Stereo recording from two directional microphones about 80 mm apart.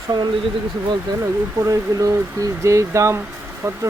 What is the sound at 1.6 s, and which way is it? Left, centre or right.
Speech, right.